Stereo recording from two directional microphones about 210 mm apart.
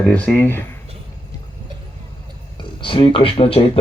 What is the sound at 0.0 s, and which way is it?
Speech, 5° left (ahead or behind).